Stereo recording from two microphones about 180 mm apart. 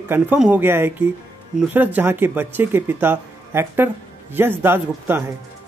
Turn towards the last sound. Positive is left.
turn(degrees=-10)  # may be behind; listen again after turning